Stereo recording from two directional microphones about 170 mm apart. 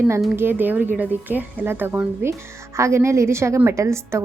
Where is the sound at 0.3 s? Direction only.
10° right (ahead or behind).